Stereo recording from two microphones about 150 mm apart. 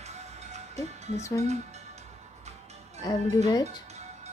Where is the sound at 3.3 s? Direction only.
25° left (ahead or behind).